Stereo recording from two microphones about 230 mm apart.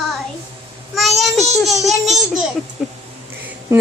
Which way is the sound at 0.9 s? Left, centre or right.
Centre.